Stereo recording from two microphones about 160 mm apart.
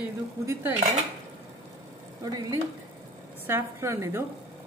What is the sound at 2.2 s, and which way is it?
Speech, 20° right (ahead or behind).